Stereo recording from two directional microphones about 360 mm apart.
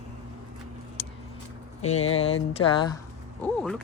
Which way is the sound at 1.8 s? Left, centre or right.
Centre.